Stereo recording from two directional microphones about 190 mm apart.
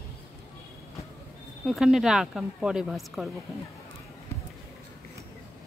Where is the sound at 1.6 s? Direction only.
Centre (ahead or behind).